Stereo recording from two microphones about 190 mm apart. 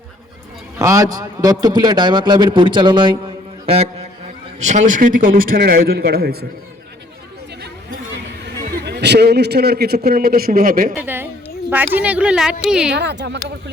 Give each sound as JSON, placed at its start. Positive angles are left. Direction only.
{"t": 0.8, "sound": "a man's voice", "side_deg": -15}
{"t": 4.6, "sound": "a man's voice", "side_deg": -40}
{"t": 8.6, "sound": "a man's voice", "side_deg": -55}
{"t": 10.9, "sound": "a woman's voice", "side_deg": -10}
{"t": 12.9, "sound": "a man's voice", "side_deg": -65}